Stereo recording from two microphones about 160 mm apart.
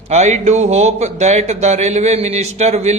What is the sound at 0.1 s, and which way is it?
Speech, 45° right (ahead or behind).